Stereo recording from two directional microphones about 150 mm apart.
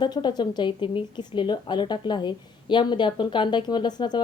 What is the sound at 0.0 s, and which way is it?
Speech, 30° left (ahead or behind).